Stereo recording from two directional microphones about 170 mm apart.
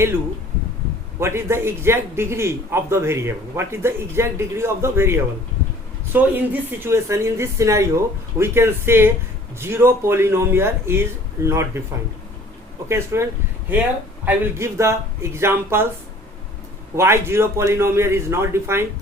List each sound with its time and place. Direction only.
1.2 s a man's voice: 15° right (ahead or behind)
12.9 s a man's voice: 15° right (ahead or behind)
14.3 s a man's voice: 15° right (ahead or behind)
16.9 s a man's voice: 15° right (ahead or behind)